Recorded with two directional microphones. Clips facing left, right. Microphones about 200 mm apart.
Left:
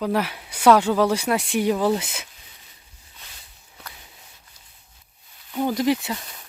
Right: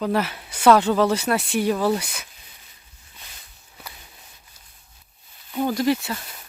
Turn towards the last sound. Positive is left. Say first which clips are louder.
# even
turn(degrees=0)  # may be behind; listen again after turning